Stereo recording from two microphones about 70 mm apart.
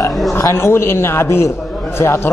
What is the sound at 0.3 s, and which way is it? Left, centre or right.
A man's voice, left.